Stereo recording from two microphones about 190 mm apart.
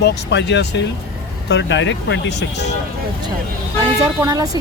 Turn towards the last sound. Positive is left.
turn(degrees=-15)  # may be behind; listen again after turning